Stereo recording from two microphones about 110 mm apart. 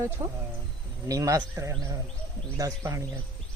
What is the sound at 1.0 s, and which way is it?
A man's voice, 30° right (ahead or behind).